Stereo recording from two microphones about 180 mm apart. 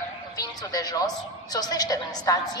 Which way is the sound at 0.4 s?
20° left (ahead or behind).